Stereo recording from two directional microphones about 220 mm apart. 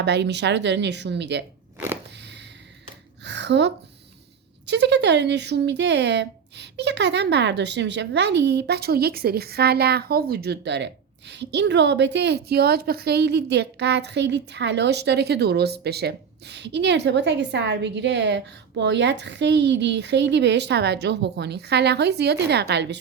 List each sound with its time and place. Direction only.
0.0 s speech: 50° right (ahead or behind)
3.2 s a sound: 50° right (ahead or behind)
4.6 s speech: 50° right (ahead or behind)